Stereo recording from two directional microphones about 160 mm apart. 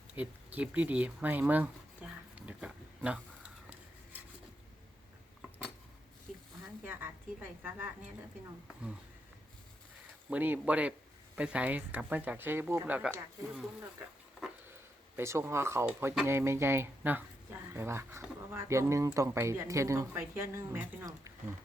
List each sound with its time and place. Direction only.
0.2 s speech: 10° right (ahead or behind)
6.8 s a sound: 15° right (ahead or behind)
10.2 s speech: 10° right (ahead or behind)
15.1 s speech: 15° right (ahead or behind)